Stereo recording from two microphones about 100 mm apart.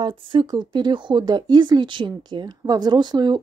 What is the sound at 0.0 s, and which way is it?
A woman's voice, 50° right (ahead or behind).